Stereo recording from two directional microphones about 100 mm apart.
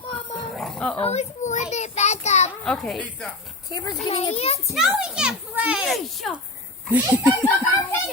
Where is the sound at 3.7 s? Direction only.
40° left (ahead or behind).